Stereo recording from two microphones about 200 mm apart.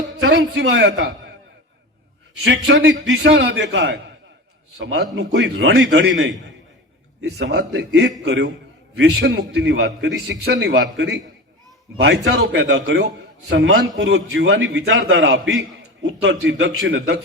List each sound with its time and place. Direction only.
0.2 s a man's voice: 65° right (ahead or behind)
2.5 s a man's voice: 65° right (ahead or behind)